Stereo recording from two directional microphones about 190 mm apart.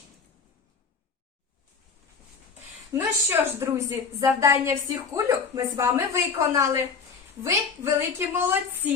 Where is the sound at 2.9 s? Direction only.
15° right (ahead or behind).